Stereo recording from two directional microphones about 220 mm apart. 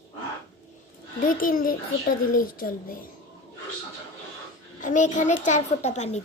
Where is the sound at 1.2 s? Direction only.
40° left (ahead or behind).